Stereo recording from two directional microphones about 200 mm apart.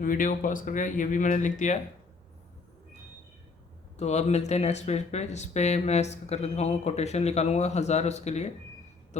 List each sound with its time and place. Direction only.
0.0 s speech: 45° left (ahead or behind)
3.9 s speech: 35° left (ahead or behind)